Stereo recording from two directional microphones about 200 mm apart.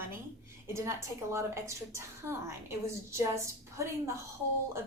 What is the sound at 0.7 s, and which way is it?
A woman's voice, 15° right (ahead or behind).